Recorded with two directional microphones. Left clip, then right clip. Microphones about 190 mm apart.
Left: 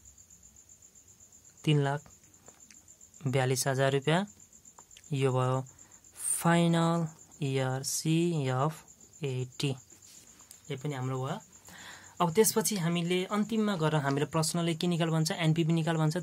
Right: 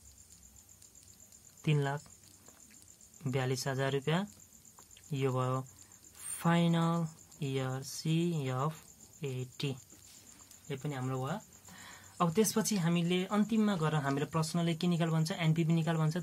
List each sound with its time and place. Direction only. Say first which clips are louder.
1.6 s speech: left 5 dB; 30° left (ahead or behind)
3.3 s speech: left 6 dB; 40° left (ahead or behind)